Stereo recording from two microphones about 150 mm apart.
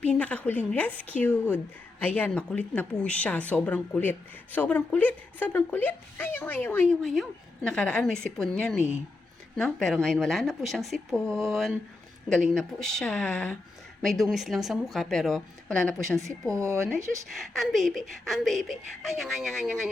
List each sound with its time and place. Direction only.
0.0 s a woman's voice: 10° left (ahead or behind)
7.0 s a woman's voice: centre (ahead or behind)
16.5 s speech: 20° right (ahead or behind)
17.4 s a woman's voice: centre (ahead or behind)